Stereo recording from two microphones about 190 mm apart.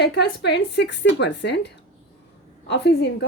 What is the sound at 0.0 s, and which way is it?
A woman's voice, 65° left (ahead or behind).